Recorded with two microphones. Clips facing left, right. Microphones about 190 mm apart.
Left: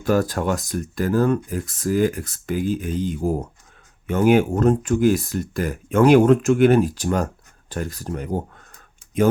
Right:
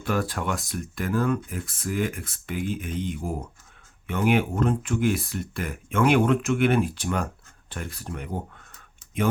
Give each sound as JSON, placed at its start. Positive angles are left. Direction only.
{"t": 0.0, "sound": "speech", "side_deg": 40}